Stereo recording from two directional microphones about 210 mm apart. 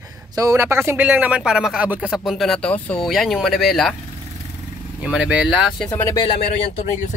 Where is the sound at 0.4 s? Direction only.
15° right (ahead or behind).